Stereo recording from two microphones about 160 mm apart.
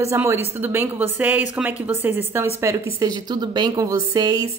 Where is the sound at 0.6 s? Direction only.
15° right (ahead or behind).